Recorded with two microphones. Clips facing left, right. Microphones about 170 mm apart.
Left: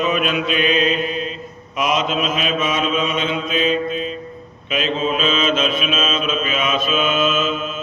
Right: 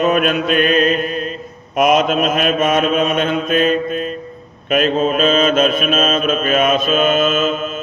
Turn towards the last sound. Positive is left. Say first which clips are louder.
# right 3 dB
turn(degrees=-45)  # may be behind; listen again after turning